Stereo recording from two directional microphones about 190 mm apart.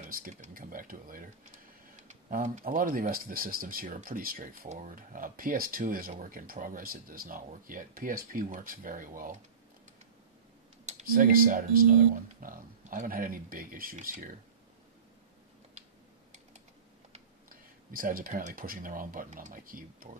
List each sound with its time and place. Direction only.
0.1 s a sound: 45° right (ahead or behind)
2.0 s speech: 40° right (ahead or behind)
10.9 s speech: 40° right (ahead or behind)
17.1 s speech: 45° right (ahead or behind)